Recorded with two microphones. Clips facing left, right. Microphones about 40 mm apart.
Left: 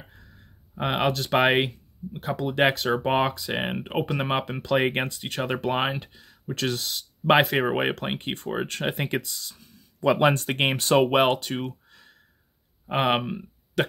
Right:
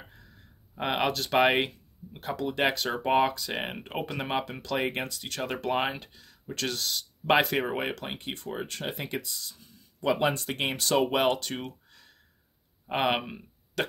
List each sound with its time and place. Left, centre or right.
0.7 s speech: centre
2.4 s speech: left
2.7 s speech: centre
7.6 s speech: left
8.5 s speech: left
10.3 s speech: left
10.8 s speech: left
11.3 s a sound: centre
12.8 s speech: centre